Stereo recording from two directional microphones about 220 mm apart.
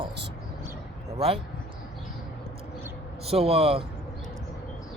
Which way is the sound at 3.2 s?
25° right (ahead or behind).